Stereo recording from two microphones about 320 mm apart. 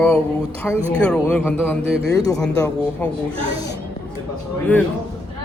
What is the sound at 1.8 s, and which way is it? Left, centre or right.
Speech, right.